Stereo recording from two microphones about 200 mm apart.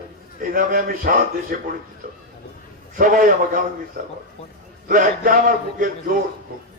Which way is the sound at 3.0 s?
45° right (ahead or behind).